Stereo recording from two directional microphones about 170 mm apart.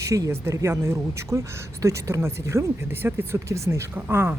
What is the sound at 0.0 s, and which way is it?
Speech, 15° right (ahead or behind).